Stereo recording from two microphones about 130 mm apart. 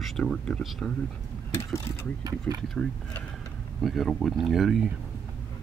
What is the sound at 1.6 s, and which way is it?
Speech, 20° left (ahead or behind).